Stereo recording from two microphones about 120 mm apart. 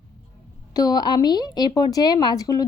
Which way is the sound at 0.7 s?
35° left (ahead or behind).